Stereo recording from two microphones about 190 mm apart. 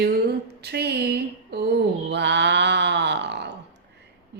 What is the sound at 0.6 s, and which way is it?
Speech, 60° right (ahead or behind).